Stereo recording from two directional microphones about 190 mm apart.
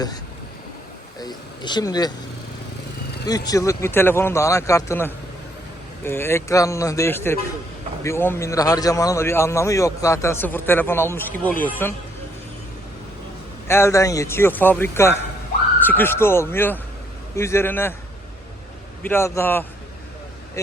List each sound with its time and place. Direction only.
1.2 s speech: 20° left (ahead or behind)
3.2 s a man's voice: 20° left (ahead or behind)
13.7 s a man's voice: 15° left (ahead or behind)
19.0 s a man's voice: 15° left (ahead or behind)